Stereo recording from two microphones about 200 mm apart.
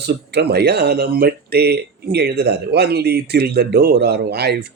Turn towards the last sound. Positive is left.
turn(degrees=-55)  # may be behind; listen again after turning